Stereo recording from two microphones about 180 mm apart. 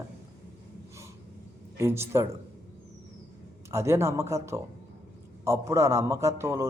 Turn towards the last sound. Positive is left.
turn(degrees=-15)  # may be behind; listen again after turning